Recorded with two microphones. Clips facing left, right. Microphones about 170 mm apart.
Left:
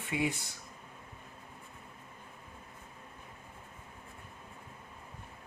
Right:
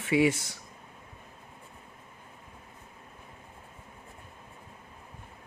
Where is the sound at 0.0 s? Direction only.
80° right.